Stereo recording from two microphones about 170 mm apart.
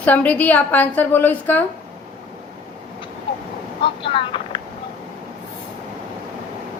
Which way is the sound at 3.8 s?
30° left (ahead or behind).